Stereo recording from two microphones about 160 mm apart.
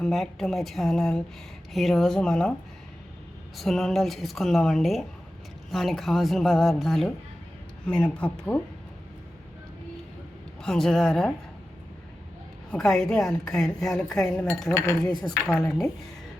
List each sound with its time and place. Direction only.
0.0 s speech: centre (ahead or behind)
3.6 s speech: centre (ahead or behind)
10.6 s speech: 5° left (ahead or behind)
12.7 s speech: centre (ahead or behind)
15.2 s speech: 5° left (ahead or behind)